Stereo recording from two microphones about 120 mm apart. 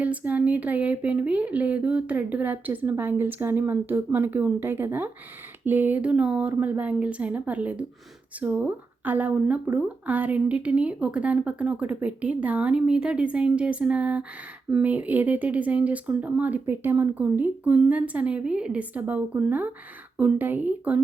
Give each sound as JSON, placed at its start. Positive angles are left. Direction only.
{"t": 0.0, "sound": "speech", "side_deg": -10}